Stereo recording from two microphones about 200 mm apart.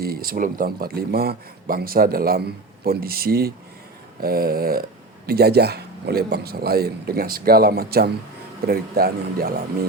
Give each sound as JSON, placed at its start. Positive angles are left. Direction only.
{"t": 0.0, "sound": "speech", "side_deg": -50}